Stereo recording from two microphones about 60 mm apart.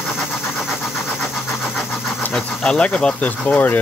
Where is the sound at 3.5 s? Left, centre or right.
Left.